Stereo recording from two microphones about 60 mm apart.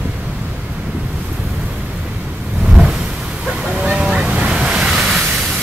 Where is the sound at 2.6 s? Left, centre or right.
Centre.